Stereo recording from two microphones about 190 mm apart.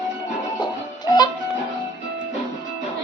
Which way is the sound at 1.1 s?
20° left (ahead or behind).